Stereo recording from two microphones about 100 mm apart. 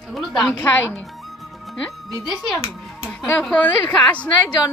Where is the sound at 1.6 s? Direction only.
Centre (ahead or behind).